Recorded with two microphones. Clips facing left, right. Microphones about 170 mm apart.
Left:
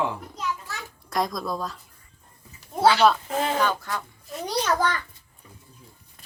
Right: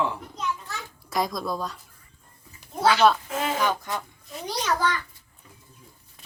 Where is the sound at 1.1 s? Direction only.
Centre (ahead or behind).